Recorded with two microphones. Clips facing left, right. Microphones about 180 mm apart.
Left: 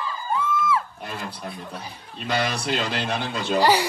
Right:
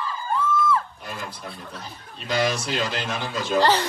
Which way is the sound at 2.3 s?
60° left (ahead or behind).